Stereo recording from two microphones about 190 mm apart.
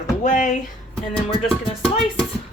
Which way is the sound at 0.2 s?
40° left (ahead or behind).